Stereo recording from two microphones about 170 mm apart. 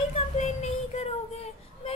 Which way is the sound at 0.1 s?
40° left (ahead or behind).